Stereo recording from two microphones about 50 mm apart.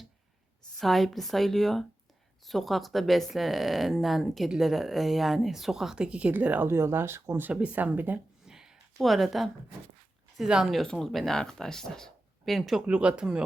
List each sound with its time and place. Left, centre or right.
0.8 s speech: centre; by 6.3 s right
6.4 s speech: right
6.7 s speech: right
7.5 s speech: right
8.4 s a sound: centre
9.0 s speech: centre
12.8 s speech: right